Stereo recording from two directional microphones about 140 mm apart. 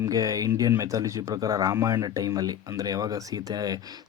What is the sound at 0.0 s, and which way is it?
Speech, 25° right (ahead or behind).